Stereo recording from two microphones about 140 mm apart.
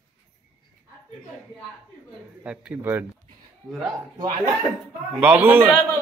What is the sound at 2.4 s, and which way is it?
Speech, 10° right (ahead or behind).